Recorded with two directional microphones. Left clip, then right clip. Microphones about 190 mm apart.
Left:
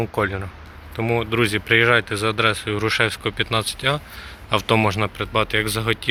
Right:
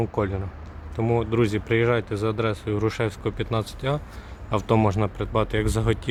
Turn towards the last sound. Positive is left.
turn(degrees=-20)  # may be behind; listen again after turning